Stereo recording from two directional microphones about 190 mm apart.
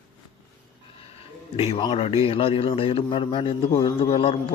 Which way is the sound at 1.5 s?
25° left (ahead or behind).